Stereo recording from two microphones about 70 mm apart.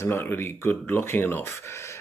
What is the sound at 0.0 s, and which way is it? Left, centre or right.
Speech, left.